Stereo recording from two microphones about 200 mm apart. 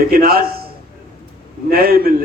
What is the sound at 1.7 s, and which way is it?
Speech, 50° right (ahead or behind).